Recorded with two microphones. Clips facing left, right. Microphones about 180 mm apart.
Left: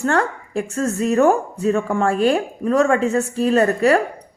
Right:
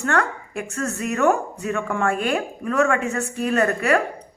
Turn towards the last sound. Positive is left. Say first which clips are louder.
# left 4 dB
turn(degrees=30)  # may be behind; listen again after turning